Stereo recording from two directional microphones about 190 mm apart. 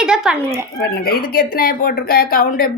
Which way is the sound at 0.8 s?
55° left (ahead or behind).